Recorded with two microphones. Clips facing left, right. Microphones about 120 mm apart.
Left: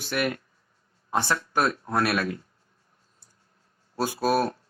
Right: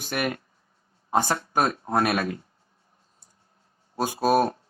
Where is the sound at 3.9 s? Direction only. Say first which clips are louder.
Right 2 dB; 45° right (ahead or behind).